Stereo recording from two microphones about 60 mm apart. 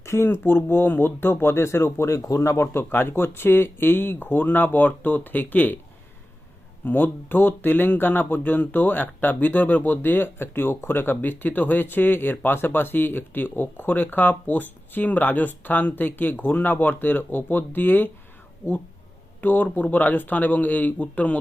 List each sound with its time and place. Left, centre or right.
0.0 s speech: left
2.9 s speech: left
6.8 s speech: left
19.4 s speech: left